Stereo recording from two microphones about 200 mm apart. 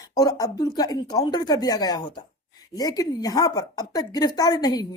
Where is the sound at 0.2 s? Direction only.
20° left (ahead or behind).